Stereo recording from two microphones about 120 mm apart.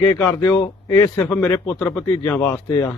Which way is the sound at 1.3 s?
15° left (ahead or behind).